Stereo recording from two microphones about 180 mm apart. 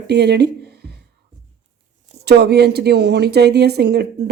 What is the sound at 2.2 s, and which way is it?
Speech, 65° right (ahead or behind).